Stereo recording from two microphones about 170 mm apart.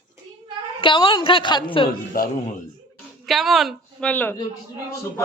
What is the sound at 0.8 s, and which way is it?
A man's voice, 30° left (ahead or behind).